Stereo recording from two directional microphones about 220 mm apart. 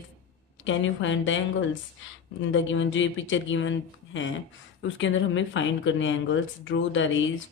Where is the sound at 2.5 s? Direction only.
60° left (ahead or behind).